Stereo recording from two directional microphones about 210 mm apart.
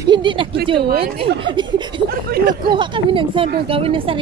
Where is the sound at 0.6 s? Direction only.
25° right (ahead or behind).